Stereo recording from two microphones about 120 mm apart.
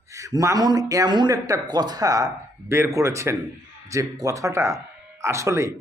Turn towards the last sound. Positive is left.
turn(degrees=-25)  # may be behind; listen again after turning